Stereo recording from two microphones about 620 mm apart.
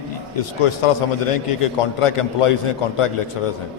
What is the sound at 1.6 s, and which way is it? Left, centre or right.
Speech, left.